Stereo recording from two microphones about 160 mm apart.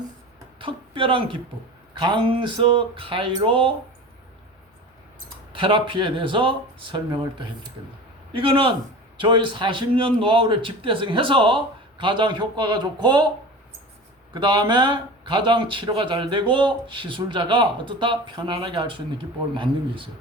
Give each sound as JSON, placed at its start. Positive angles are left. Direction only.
{"t": 0.6, "sound": "a man's voice", "side_deg": -35}
{"t": 5.5, "sound": "a man's voice", "side_deg": -35}
{"t": 14.3, "sound": "a man's voice", "side_deg": -30}